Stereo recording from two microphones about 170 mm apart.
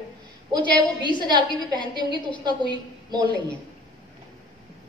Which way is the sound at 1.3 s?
25° right (ahead or behind).